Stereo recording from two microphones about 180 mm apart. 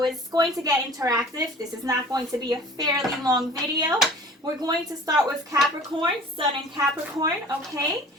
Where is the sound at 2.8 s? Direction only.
20° right (ahead or behind).